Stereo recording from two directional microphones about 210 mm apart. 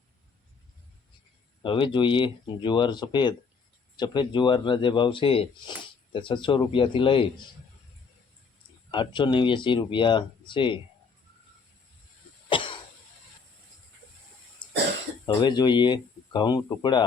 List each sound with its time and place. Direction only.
1.6 s speech: 25° left (ahead or behind)
8.9 s speech: 20° left (ahead or behind)
12.5 s cough: 25° left (ahead or behind)
15.3 s speech: 20° left (ahead or behind)